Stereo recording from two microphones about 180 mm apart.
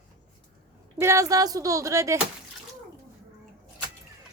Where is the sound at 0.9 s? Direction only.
15° right (ahead or behind).